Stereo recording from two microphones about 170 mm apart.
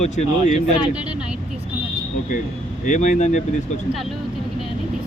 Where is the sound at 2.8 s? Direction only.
45° left (ahead or behind).